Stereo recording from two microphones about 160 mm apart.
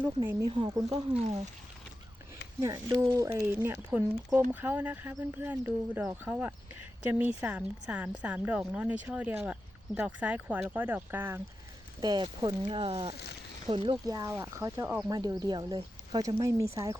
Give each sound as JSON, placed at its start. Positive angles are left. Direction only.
{"t": 0.4, "sound": "speech", "side_deg": -25}
{"t": 2.6, "sound": "speech", "side_deg": -20}
{"t": 11.9, "sound": "speech", "side_deg": -25}